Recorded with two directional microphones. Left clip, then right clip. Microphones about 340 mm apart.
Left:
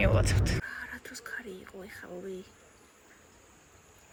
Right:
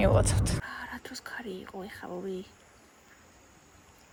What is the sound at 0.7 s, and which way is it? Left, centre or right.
Whispering, centre.